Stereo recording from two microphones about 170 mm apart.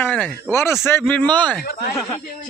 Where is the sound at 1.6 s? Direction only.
65° left (ahead or behind).